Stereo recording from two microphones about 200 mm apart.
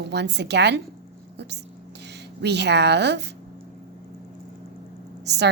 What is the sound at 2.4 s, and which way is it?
Speech, 60° right (ahead or behind).